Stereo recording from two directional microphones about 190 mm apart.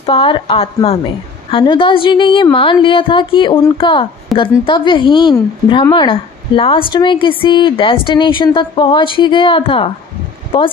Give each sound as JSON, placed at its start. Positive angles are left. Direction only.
{"t": 0.0, "sound": "a woman's voice", "side_deg": 30}